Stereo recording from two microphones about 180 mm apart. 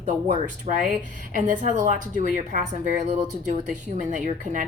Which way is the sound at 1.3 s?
45° right (ahead or behind).